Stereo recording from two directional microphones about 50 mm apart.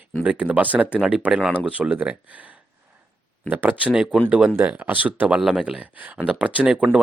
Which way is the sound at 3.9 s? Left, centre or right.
Centre.